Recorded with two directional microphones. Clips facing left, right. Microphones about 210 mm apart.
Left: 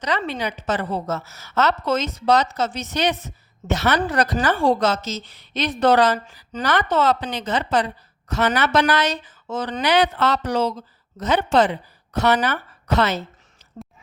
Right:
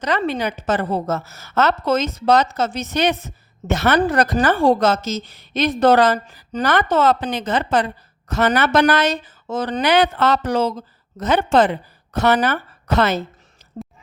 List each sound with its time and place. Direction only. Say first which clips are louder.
0.2 s speech: right 5 dB; 50° right (ahead or behind)